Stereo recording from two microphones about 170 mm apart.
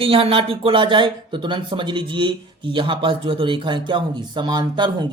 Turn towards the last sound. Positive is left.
turn(degrees=-25)  # may be behind; listen again after turning